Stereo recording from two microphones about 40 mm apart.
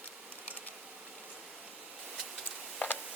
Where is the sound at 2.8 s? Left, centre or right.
Left.